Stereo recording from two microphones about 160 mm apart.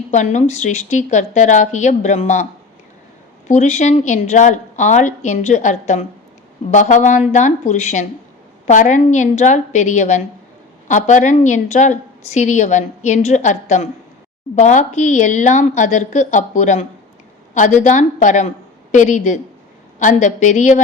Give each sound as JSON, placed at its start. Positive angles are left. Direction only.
{"t": 0.1, "sound": "a woman's voice", "side_deg": 50}
{"t": 3.5, "sound": "a woman's voice", "side_deg": 45}